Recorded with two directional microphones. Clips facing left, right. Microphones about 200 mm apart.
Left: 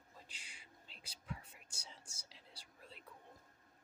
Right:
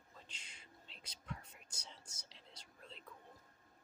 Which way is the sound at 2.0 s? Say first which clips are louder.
Right 1 dB; 30° left (ahead or behind).